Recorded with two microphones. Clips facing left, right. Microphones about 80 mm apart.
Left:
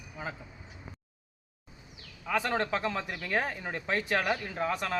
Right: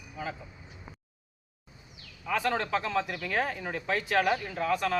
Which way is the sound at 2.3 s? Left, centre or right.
Left.